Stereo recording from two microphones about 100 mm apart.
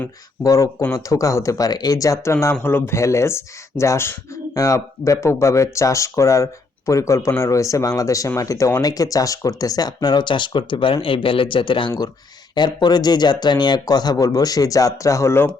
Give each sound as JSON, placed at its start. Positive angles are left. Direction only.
{"t": 0.4, "sound": "speech", "side_deg": 35}